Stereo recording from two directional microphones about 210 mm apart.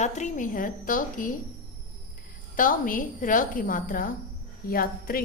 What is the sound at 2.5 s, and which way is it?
A woman's voice, 40° left (ahead or behind).